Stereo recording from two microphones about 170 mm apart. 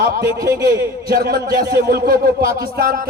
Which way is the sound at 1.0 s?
60° right (ahead or behind).